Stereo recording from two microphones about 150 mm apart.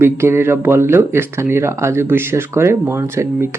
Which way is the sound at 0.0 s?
15° right (ahead or behind).